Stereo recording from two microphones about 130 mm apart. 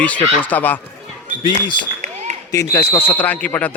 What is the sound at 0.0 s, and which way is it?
Speech, 10° left (ahead or behind).